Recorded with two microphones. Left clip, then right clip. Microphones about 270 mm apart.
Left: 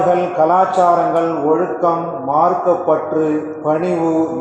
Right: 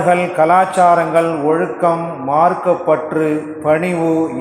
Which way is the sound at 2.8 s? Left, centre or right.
Right.